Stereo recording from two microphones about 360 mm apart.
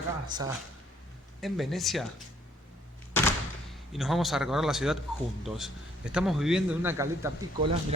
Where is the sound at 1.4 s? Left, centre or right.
Centre.